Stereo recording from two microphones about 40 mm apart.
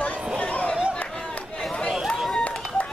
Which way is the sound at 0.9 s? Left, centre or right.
Left.